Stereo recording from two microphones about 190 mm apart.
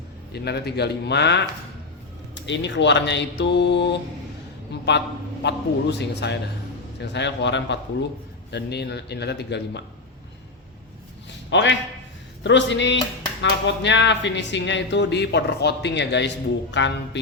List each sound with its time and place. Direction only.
0.3 s a man's voice: 60° left (ahead or behind)
11.5 s a man's voice: 70° left (ahead or behind)